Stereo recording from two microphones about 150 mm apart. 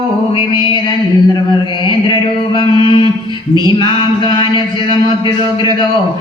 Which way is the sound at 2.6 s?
35° left (ahead or behind).